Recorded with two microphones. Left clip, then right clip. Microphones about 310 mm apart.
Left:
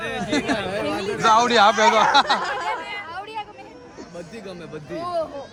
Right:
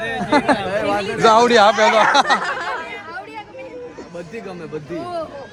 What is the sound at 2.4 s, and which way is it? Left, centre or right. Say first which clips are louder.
Speech: right 3 dB; right.